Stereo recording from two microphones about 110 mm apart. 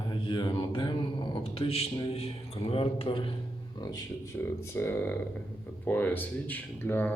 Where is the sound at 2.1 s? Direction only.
65° left (ahead or behind).